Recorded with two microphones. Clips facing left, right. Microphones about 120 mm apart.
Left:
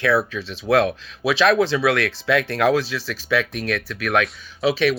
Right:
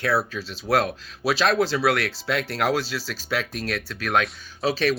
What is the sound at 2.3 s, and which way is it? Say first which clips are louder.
Speech: left 7 dB; 50° left (ahead or behind).